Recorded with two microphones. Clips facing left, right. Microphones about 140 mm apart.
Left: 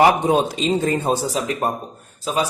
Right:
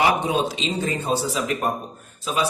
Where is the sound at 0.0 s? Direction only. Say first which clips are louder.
Left 5 dB; 45° left (ahead or behind).